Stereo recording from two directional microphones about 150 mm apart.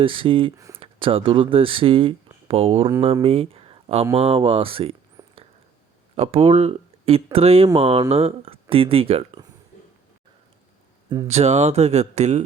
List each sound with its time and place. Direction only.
0.0 s speech: 35° right (ahead or behind)
0.5 s speech: 20° right (ahead or behind)
0.8 s speech: 35° right (ahead or behind)
3.2 s a sound: 40° right (ahead or behind)
4.1 s speech: 40° right (ahead or behind)
5.2 s a sound: 25° right (ahead or behind)
6.1 s speech: 40° right (ahead or behind)
11.3 s speech: 45° right (ahead or behind)